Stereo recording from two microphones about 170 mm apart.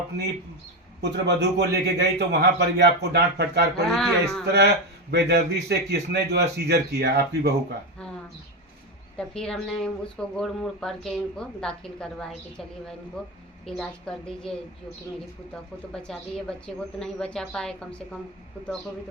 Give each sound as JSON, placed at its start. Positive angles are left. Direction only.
{"t": 1.1, "sound": "a man's voice", "side_deg": -80}
{"t": 3.8, "sound": "speech", "side_deg": 0}
{"t": 4.4, "sound": "a man's voice", "side_deg": -75}
{"t": 9.1, "sound": "speech", "side_deg": 5}
{"t": 15.9, "sound": "speech", "side_deg": 5}